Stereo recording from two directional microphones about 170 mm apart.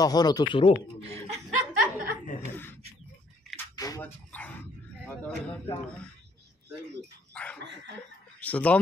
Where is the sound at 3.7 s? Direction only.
20° left (ahead or behind).